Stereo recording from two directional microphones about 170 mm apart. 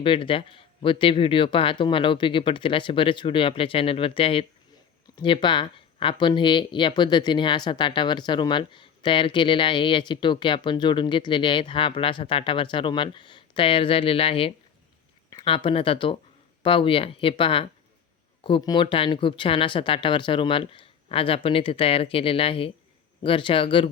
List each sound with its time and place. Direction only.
0.0 s speech: 30° left (ahead or behind)